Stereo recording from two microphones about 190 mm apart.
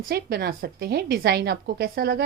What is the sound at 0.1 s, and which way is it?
A woman's voice, 55° right (ahead or behind).